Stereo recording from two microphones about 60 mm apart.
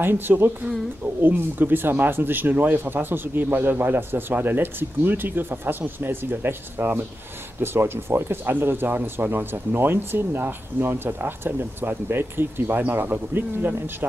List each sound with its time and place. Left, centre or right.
0.0 s speech: right